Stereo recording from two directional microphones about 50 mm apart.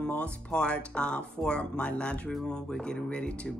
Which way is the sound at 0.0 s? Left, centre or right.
Left.